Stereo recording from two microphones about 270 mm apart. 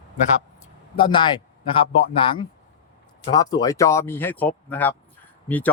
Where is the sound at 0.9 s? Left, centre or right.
Centre.